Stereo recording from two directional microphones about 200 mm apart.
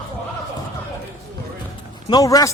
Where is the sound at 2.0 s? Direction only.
20° left (ahead or behind).